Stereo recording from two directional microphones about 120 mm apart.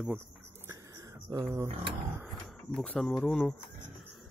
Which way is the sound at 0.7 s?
30° right (ahead or behind).